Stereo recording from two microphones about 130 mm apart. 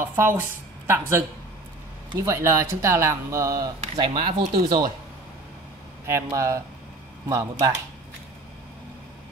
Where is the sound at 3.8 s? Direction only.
45° right (ahead or behind).